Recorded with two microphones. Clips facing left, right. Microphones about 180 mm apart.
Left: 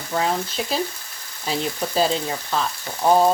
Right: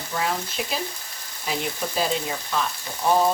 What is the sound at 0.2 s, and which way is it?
Frying, 30° left (ahead or behind).